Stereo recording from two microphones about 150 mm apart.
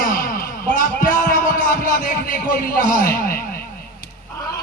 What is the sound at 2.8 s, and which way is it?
Speech, 70° left (ahead or behind).